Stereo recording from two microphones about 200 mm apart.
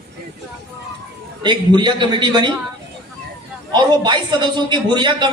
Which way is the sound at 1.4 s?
20° right (ahead or behind).